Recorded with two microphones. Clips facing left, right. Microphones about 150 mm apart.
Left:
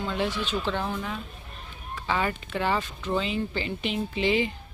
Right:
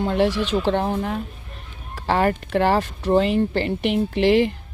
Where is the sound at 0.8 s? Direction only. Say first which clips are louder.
Right 8 dB; 50° right (ahead or behind).